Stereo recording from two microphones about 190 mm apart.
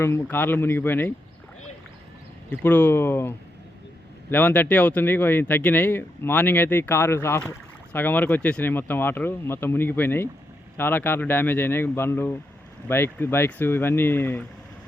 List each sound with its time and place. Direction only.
0.0 s speech: 10° left (ahead or behind)
2.5 s speech: 10° left (ahead or behind)